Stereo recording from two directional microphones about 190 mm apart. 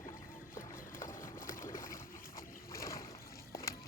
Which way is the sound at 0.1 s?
15° left (ahead or behind).